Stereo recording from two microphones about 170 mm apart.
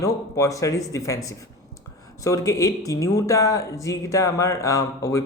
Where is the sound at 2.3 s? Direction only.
20° left (ahead or behind).